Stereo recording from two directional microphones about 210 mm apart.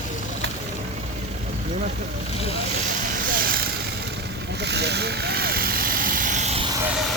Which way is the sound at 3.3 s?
45° right (ahead or behind).